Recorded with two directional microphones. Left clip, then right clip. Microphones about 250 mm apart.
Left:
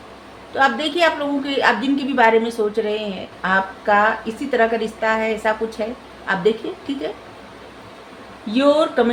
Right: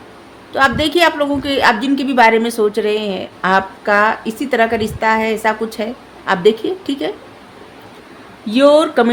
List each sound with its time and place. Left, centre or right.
0.5 s a woman's voice: right
8.4 s a woman's voice: right